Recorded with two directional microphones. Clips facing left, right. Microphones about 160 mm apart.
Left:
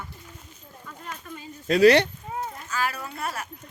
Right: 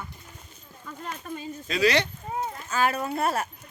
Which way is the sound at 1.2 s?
30° right (ahead or behind).